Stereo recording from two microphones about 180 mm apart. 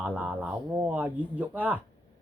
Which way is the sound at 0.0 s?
10° right (ahead or behind).